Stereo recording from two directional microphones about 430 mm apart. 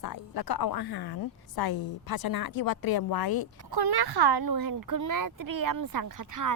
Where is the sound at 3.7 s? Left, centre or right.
Right.